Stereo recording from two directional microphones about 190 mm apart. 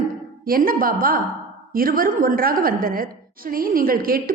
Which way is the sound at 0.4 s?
50° right (ahead or behind).